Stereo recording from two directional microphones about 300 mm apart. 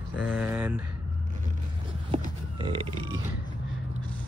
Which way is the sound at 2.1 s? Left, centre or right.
Centre.